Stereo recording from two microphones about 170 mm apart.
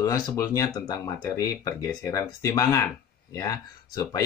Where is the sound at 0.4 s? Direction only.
20° left (ahead or behind).